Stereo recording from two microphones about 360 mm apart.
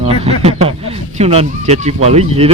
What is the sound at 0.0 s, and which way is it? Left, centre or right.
Speech, centre.